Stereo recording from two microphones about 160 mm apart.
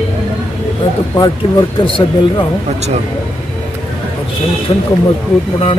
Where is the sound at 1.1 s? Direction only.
25° left (ahead or behind).